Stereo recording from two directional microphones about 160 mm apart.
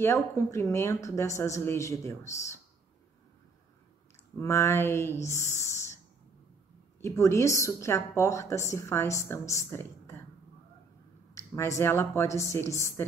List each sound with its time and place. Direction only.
0.0 s a woman's voice: 20° left (ahead or behind)
4.4 s a woman's voice: 15° left (ahead or behind)
7.0 s a woman's voice: 15° left (ahead or behind)
11.5 s a woman's voice: 15° left (ahead or behind)